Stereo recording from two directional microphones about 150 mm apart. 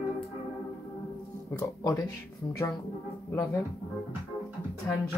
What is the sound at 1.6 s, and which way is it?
Speech, 25° left (ahead or behind).